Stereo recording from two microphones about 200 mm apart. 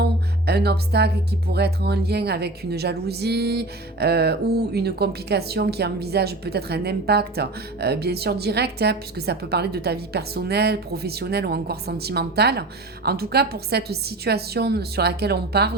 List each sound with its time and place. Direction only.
0.0 s music: 55° right (ahead or behind)